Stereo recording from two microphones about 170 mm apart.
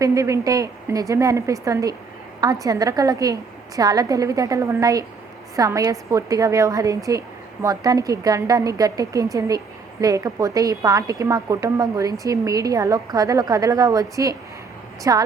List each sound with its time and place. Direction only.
0.0 s a woman's voice: 20° right (ahead or behind)